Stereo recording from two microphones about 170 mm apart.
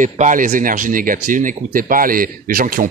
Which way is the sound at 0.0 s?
50° right (ahead or behind).